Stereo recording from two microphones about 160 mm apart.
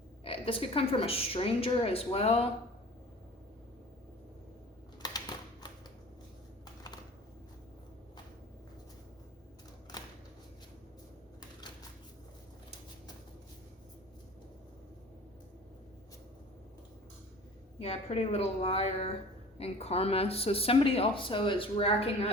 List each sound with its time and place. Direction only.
0.3 s speech: 35° left (ahead or behind)
5.0 s typewriter: 25° left (ahead or behind)
9.9 s a sound: 25° left (ahead or behind)
17.7 s a woman's voice: 40° left (ahead or behind)